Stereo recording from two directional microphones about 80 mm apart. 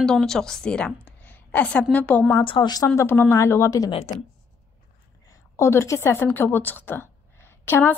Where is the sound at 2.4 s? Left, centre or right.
Left.